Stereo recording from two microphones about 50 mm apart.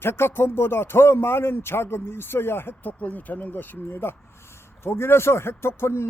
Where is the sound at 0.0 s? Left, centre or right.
Left.